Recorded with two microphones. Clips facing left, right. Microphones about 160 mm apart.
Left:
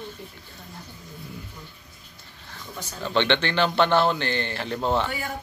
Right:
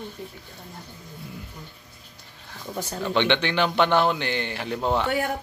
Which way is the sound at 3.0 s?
15° right (ahead or behind).